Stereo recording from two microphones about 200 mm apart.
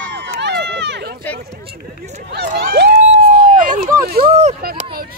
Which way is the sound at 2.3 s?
55° right (ahead or behind).